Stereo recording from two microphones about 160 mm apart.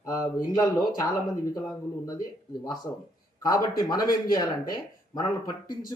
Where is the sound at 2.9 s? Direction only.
15° left (ahead or behind).